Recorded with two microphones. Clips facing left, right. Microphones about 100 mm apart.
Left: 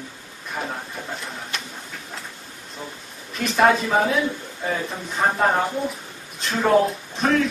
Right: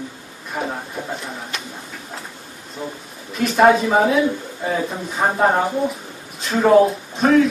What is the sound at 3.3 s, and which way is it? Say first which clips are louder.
Speech: right 4 dB; 5° right (ahead or behind).